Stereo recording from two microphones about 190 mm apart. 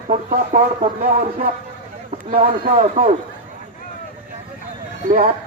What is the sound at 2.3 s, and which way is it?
Speech, 50° right (ahead or behind).